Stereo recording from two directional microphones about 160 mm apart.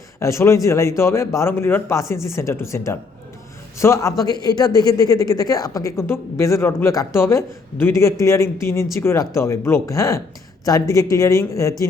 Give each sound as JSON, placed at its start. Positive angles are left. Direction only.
{"t": 0.2, "sound": "a man's voice", "side_deg": 20}